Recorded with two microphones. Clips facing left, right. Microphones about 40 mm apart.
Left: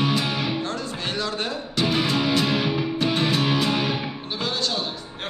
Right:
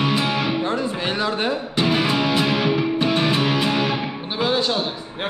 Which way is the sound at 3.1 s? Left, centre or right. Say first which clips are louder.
Right 1 dB; right.